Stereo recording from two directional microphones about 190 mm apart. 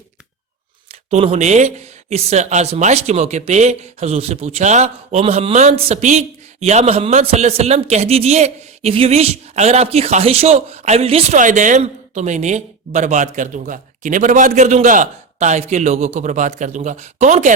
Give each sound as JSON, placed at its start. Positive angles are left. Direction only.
{"t": 0.9, "sound": "speech", "side_deg": -35}